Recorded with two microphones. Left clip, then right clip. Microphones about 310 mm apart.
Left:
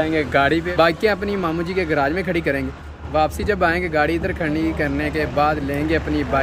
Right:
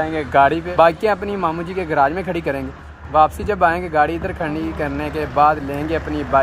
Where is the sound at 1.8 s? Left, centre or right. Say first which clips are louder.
Right 4 dB; right.